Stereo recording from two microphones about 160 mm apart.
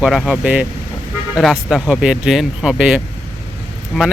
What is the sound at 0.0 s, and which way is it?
Speech, centre (ahead or behind).